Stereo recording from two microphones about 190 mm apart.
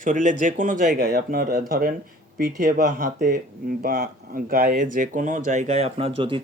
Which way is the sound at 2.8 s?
40° right (ahead or behind).